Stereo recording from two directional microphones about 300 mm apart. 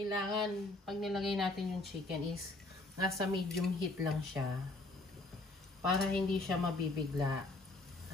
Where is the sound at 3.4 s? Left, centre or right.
Centre.